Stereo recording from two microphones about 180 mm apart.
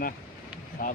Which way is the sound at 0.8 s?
50° left (ahead or behind).